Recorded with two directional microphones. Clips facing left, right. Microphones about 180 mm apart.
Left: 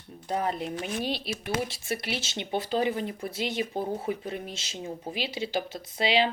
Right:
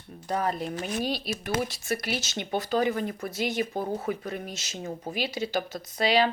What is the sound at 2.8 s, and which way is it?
Speech, 45° right (ahead or behind).